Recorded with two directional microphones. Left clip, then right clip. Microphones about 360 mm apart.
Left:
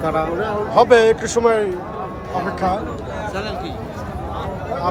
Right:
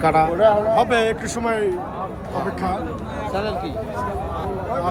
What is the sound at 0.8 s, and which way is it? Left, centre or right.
Speech, centre.